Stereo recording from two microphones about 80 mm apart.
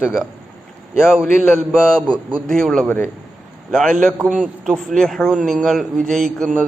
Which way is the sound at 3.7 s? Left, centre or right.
Centre.